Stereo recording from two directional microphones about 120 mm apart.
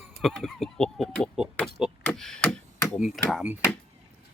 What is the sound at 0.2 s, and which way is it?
Speech, centre (ahead or behind).